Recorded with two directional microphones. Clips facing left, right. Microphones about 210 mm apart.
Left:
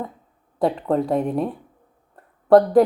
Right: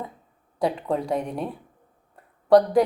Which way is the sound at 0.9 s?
Centre (ahead or behind).